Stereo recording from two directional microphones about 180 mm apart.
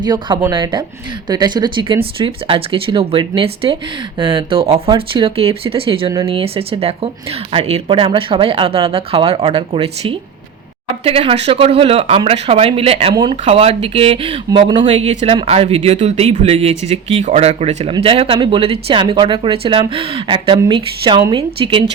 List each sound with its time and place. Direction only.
0.0 s a woman's voice: 25° right (ahead or behind)
14.8 s a woman's voice: 35° right (ahead or behind)